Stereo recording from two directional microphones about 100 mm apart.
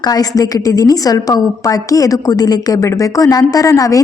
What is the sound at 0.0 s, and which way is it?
A woman's voice, 40° left (ahead or behind).